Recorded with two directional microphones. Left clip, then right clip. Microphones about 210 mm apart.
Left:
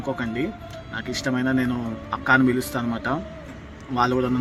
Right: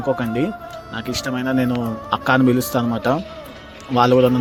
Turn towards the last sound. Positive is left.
turn(degrees=-30)  # may be behind; listen again after turning